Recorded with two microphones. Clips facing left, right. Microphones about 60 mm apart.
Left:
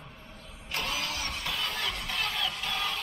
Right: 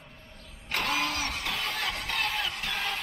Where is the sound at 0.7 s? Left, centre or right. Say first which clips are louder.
Right 4 dB; right.